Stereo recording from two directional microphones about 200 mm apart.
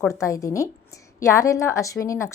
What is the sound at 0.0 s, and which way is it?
A woman's voice, 15° left (ahead or behind).